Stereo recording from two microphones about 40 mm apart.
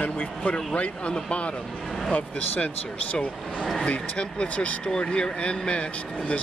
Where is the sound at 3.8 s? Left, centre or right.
Left.